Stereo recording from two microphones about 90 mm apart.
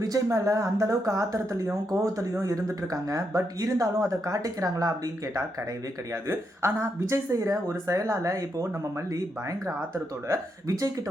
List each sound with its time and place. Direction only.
0.0 s speech: 40° right (ahead or behind)